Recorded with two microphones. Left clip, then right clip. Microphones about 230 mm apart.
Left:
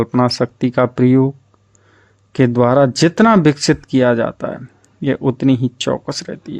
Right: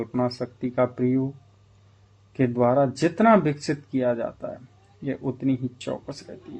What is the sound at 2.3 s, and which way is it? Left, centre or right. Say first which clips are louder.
Speech: left 8 dB; left.